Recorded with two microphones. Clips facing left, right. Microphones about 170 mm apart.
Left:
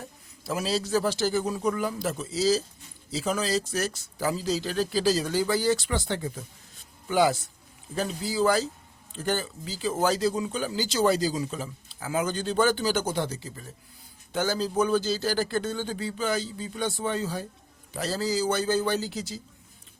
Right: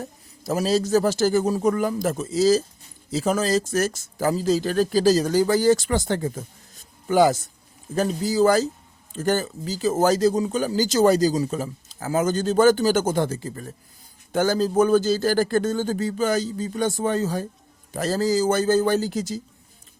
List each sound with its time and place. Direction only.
0.0 s speech: 40° right (ahead or behind)